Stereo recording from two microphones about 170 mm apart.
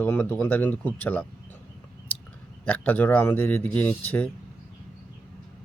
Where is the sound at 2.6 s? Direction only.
10° left (ahead or behind).